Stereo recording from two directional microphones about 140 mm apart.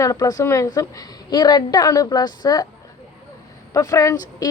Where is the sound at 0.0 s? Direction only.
25° left (ahead or behind).